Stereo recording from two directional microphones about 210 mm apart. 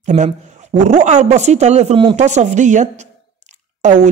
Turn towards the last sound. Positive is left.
turn(degrees=-35)  # may be behind; listen again after turning